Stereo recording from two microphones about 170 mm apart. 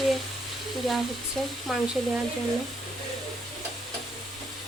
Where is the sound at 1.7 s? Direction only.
Centre (ahead or behind).